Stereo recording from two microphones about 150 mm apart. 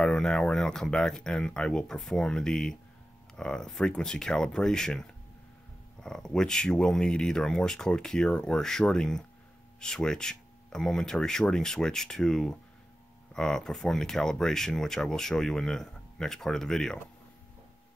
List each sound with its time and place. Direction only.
0.0 s speech: 5° left (ahead or behind)